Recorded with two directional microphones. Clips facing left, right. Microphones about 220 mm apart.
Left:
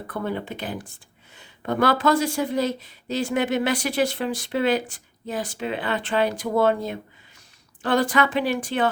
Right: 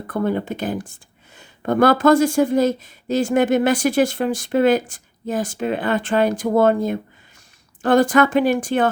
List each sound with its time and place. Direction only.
0.1 s speech: 45° right (ahead or behind)